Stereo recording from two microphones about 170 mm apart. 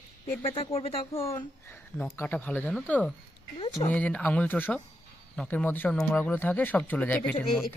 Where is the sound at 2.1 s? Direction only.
10° left (ahead or behind).